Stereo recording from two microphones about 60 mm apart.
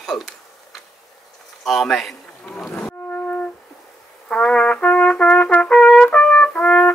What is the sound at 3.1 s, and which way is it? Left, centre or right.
Music, left.